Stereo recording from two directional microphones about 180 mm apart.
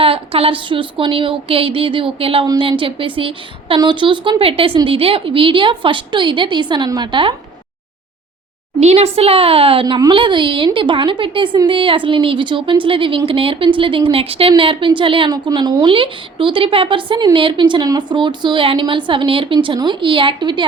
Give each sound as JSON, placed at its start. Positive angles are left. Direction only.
{"t": 0.0, "sound": "a woman's voice", "side_deg": -30}
{"t": 8.8, "sound": "a woman's voice", "side_deg": -35}